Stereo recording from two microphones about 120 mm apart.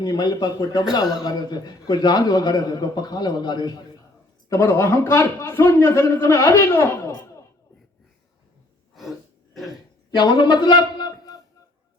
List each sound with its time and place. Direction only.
0.0 s a man's voice: 35° left (ahead or behind)
10.1 s a man's voice: 40° left (ahead or behind)